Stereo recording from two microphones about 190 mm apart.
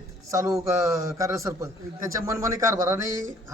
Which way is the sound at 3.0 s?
45° right (ahead or behind).